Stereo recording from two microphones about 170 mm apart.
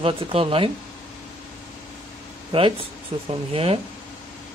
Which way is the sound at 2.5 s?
30° right (ahead or behind).